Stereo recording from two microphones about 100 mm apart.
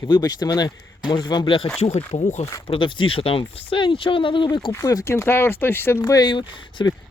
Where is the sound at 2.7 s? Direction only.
55° left (ahead or behind).